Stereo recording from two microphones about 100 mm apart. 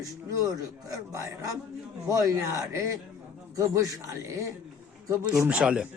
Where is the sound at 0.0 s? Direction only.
35° right (ahead or behind).